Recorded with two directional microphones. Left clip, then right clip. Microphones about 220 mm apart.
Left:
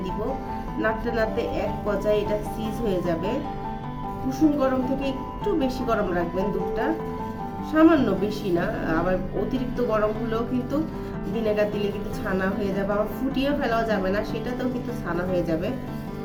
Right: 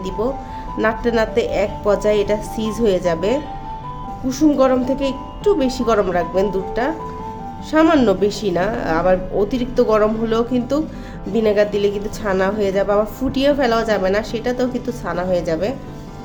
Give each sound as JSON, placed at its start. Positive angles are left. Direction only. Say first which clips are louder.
{"t": 0.8, "sound": "a woman's voice", "louder": "right 7 dB", "side_deg": -45}